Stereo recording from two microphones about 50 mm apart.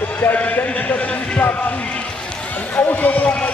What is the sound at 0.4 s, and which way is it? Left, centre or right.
Speech, left.